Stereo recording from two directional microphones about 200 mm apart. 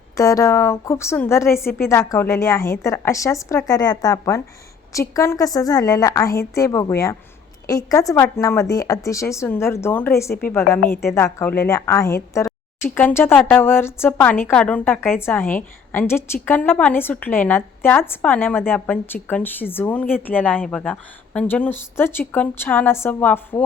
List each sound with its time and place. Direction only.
0.2 s a woman's voice: 15° left (ahead or behind)